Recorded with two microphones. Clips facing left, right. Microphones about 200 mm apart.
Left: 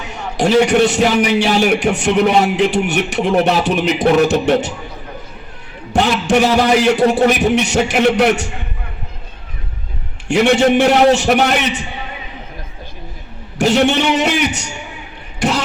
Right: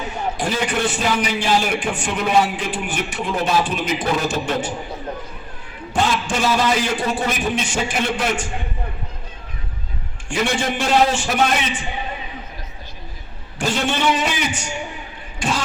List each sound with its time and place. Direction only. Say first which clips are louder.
0.1 s a man's voice: left 11 dB; 70° left (ahead or behind)
5.9 s a man's voice: left 7 dB; 70° left (ahead or behind)
10.2 s a man's voice: left 10 dB; 65° left (ahead or behind)
13.6 s a man's voice: left 8 dB; 70° left (ahead or behind)
15.4 s vehicle: left 6 dB; 70° left (ahead or behind)